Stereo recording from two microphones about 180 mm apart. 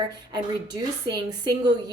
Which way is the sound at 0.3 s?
25° right (ahead or behind).